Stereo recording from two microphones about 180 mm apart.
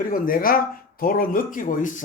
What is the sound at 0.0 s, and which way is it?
Speech, 50° left (ahead or behind).